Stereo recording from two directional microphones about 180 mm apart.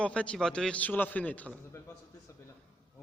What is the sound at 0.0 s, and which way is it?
A man's voice, 5° left (ahead or behind).